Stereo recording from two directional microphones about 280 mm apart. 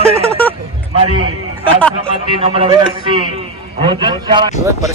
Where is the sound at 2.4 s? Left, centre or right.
Centre.